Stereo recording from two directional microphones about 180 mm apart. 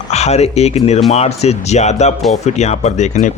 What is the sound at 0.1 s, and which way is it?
Speech, 35° left (ahead or behind).